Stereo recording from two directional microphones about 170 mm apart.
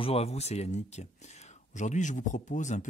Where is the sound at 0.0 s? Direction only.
35° left (ahead or behind).